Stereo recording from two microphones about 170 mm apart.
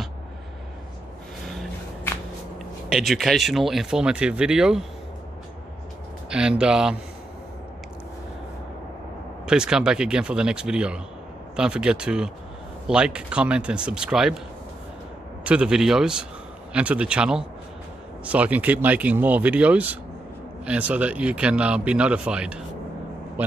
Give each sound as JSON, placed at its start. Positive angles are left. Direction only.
{"t": 1.4, "sound": "a sound", "side_deg": 5}
{"t": 2.9, "sound": "speech", "side_deg": 0}
{"t": 6.3, "sound": "speech", "side_deg": -5}
{"t": 9.5, "sound": "speech", "side_deg": -5}
{"t": 15.4, "sound": "speech", "side_deg": -5}